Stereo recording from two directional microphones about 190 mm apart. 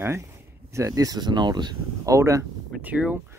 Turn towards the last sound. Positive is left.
turn(degrees=-5)  # may be behind; listen again after turning